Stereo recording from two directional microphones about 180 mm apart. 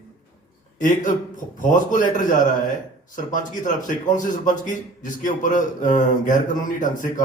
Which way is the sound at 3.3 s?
45° left (ahead or behind).